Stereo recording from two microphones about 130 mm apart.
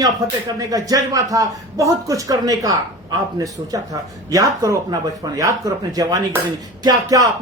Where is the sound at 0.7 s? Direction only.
30° right (ahead or behind).